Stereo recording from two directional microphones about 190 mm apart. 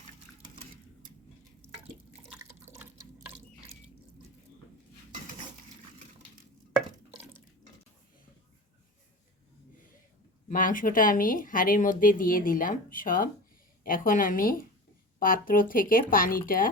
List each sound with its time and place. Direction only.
2.3 s water: 10° right (ahead or behind)
10.5 s speech: 45° left (ahead or behind)